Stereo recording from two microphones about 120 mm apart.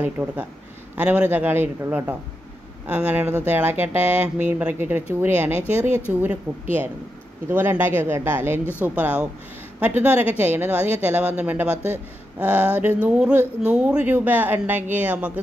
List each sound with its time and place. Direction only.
0.0 s speech: 15° right (ahead or behind)